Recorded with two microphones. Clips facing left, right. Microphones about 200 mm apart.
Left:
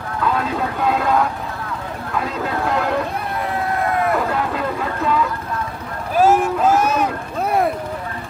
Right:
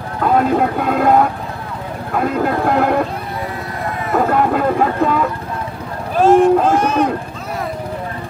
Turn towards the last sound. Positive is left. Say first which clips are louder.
# left 6 dB
turn(degrees=55)  # may be behind; listen again after turning